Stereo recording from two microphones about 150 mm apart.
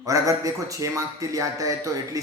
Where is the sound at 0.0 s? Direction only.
20° right (ahead or behind).